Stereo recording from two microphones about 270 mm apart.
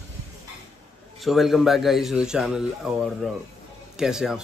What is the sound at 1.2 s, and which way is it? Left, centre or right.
Speech, centre.